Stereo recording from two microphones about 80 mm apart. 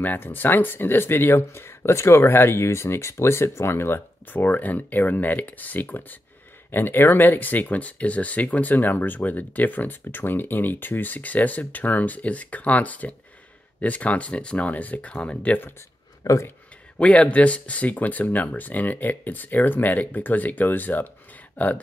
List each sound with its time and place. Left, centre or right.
0.0 s speech: left
16.3 s speech: left
17.0 s speech: centre